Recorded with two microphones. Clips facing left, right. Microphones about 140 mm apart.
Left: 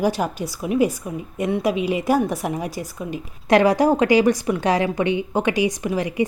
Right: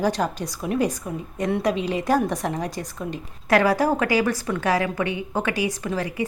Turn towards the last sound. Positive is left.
turn(degrees=15)  # may be behind; listen again after turning